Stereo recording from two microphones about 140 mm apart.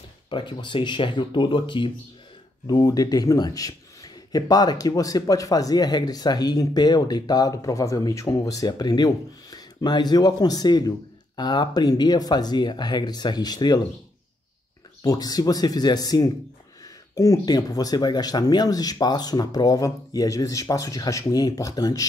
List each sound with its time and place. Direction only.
0.3 s speech: 35° left (ahead or behind)
15.0 s speech: 25° left (ahead or behind)